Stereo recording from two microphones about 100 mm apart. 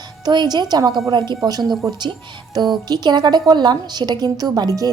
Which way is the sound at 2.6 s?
45° right (ahead or behind).